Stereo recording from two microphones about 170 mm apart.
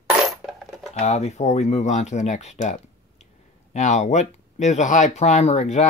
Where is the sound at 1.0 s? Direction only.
40° left (ahead or behind).